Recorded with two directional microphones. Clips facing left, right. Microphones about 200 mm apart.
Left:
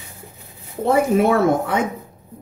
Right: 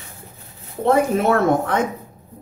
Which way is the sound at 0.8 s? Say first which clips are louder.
Left 1 dB; 10° left (ahead or behind).